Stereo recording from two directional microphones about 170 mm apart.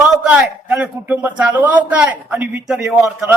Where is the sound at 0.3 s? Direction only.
5° right (ahead or behind).